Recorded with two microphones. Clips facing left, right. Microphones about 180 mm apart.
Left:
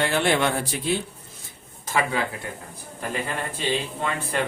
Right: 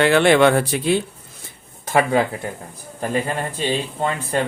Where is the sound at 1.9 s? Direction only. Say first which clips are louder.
Right 8 dB; 55° right (ahead or behind).